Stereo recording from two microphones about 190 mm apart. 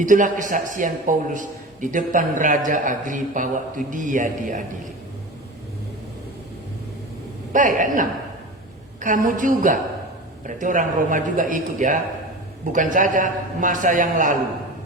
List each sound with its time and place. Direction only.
0.0 s a man's voice: 45° right (ahead or behind)
7.5 s a man's voice: 45° right (ahead or behind)